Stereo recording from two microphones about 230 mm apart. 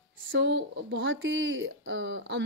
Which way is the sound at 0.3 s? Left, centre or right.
Right.